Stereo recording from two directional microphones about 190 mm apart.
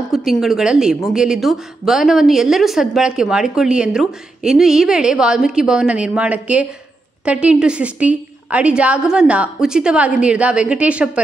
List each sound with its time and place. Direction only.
0.1 s a woman's voice: centre (ahead or behind)